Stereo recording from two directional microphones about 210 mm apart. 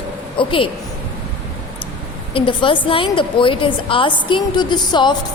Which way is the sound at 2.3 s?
25° left (ahead or behind).